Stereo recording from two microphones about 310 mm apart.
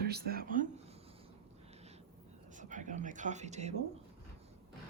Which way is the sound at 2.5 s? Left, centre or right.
Right.